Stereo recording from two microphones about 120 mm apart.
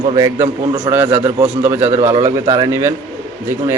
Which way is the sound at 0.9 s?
20° right (ahead or behind).